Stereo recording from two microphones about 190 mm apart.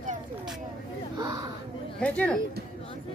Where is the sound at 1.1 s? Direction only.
20° right (ahead or behind).